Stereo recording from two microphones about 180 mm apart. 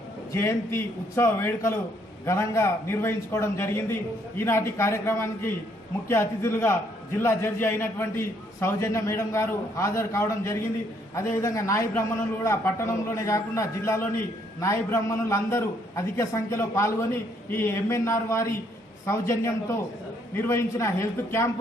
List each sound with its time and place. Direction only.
0.3 s a man's voice: 15° left (ahead or behind)